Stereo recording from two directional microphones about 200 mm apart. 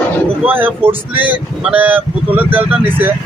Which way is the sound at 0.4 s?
10° right (ahead or behind).